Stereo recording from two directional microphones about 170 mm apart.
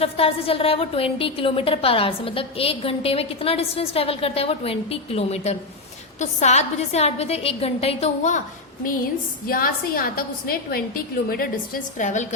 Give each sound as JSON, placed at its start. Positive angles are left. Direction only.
{"t": 0.0, "sound": "a woman's voice", "side_deg": 35}
{"t": 9.5, "sound": "a woman's voice", "side_deg": 60}